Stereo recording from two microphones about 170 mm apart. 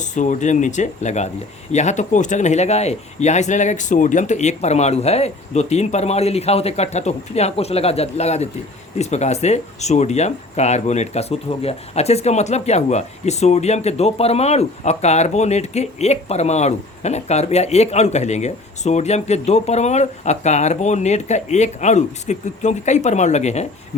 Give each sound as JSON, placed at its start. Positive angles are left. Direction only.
{"t": 0.0, "sound": "speech", "side_deg": 45}